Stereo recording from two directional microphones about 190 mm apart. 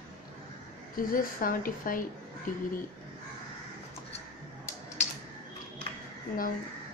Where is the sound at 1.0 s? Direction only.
45° left (ahead or behind).